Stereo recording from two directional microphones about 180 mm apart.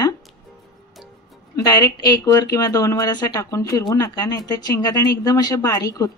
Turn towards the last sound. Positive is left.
turn(degrees=20)  # may be behind; listen again after turning